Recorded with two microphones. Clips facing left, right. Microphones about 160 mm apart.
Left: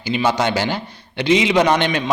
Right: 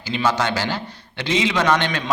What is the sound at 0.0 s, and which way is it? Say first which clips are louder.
A man's voice: left 3 dB; 15° left (ahead or behind).